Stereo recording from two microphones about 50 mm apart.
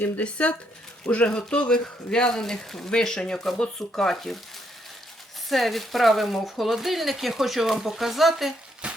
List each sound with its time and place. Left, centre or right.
0.2 s speech: left; by 4.4 s centre
5.5 s speech: centre
8.8 s a sound: right